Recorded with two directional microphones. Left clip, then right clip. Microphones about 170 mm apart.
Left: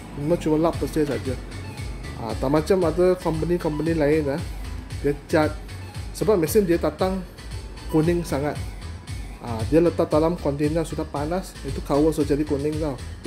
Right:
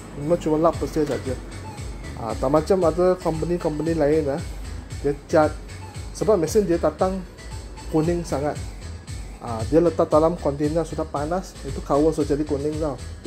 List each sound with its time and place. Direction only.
0.3 s speech: 10° left (ahead or behind)
2.2 s speech: 10° left (ahead or behind)